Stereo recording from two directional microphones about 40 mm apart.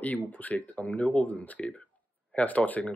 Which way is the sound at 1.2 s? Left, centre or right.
Left.